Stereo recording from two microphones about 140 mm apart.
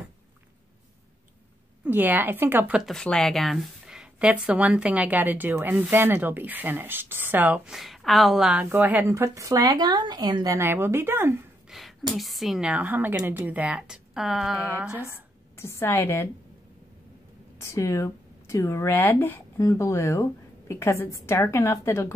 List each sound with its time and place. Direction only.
1.9 s a woman's voice: 15° right (ahead or behind)
2.8 s a woman's voice: 5° left (ahead or behind)
8.6 s speech: 15° right (ahead or behind)
11.7 s a woman's voice: centre (ahead or behind)
15.5 s a woman's voice: 20° left (ahead or behind)
17.6 s a woman's voice: 20° left (ahead or behind)